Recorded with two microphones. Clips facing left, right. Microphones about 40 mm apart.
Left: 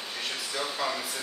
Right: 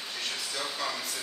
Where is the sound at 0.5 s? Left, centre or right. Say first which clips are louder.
Left 5 dB; centre.